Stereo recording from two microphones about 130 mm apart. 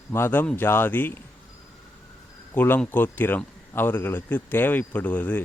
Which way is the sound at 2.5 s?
15° left (ahead or behind).